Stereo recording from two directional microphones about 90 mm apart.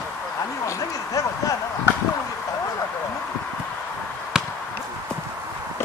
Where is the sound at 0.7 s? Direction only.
40° left (ahead or behind).